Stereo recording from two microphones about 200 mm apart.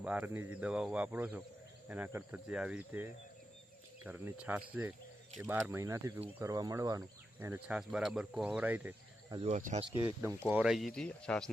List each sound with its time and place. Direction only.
0.0 s speech: 5° right (ahead or behind)
9.3 s speech: 30° right (ahead or behind)
9.6 s speech: 40° right (ahead or behind)
10.5 s speech: 5° right (ahead or behind)